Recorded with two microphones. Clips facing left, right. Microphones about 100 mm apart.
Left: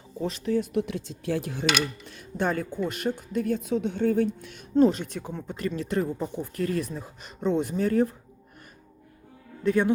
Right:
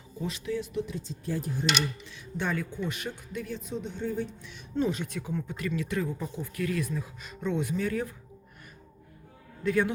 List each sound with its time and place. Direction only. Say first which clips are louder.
0.2 s speech: left 6 dB; 40° left (ahead or behind)
0.7 s speech: left 5 dB; 65° left (ahead or behind); by 1.6 s 85° left
1.7 s speech: left 3 dB; 50° left (ahead or behind)
4.7 s speech: left 8 dB; 35° left (ahead or behind)
6.3 s speech: left 2 dB; 40° left (ahead or behind)